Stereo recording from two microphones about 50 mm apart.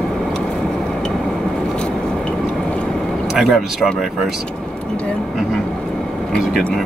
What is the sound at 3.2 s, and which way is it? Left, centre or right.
Speech, centre.